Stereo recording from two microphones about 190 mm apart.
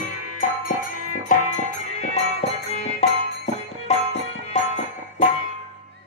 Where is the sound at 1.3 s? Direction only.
40° left (ahead or behind).